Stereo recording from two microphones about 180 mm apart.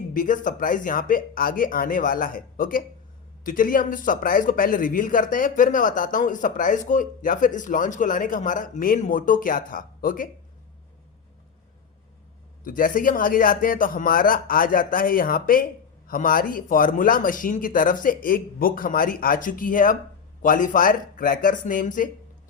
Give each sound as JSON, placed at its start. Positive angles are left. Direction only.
{"t": 0.1, "sound": "speech", "side_deg": 50}
{"t": 12.6, "sound": "speech", "side_deg": 50}